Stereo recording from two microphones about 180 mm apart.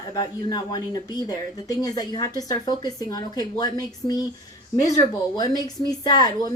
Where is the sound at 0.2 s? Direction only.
20° left (ahead or behind).